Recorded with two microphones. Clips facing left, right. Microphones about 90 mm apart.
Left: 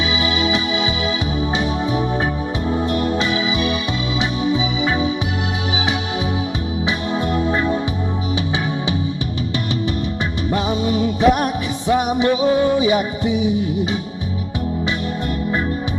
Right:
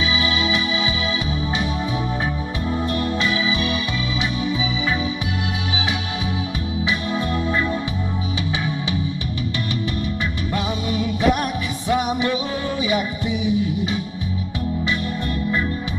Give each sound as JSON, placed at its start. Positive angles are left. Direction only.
{"t": 2.9, "sound": "music", "side_deg": 20}
{"t": 10.5, "sound": "music", "side_deg": 25}